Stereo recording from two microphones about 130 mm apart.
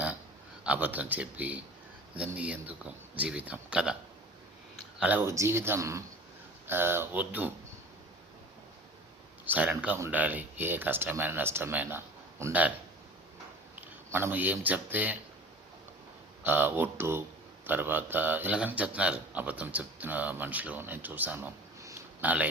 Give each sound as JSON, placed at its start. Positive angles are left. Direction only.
{"t": 0.6, "sound": "a man's voice", "side_deg": -10}
{"t": 4.9, "sound": "a man's voice", "side_deg": -15}
{"t": 9.5, "sound": "a man's voice", "side_deg": -10}
{"t": 13.8, "sound": "speech", "side_deg": -15}
{"t": 16.4, "sound": "a man's voice", "side_deg": -15}